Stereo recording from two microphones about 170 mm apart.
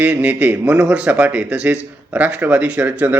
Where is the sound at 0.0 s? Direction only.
10° right (ahead or behind).